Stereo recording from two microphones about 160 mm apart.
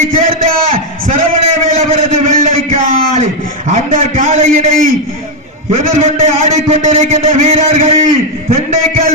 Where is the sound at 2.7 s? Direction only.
50° right (ahead or behind).